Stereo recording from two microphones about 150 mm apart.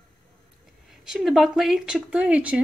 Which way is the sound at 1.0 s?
5° right (ahead or behind).